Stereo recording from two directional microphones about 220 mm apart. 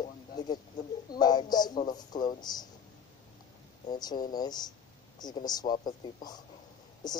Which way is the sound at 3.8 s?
20° left (ahead or behind).